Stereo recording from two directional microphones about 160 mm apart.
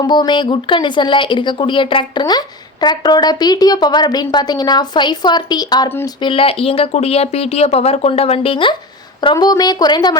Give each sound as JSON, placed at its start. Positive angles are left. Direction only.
{"t": 0.0, "sound": "a woman's voice", "side_deg": 30}
{"t": 6.2, "sound": "a woman's voice", "side_deg": 35}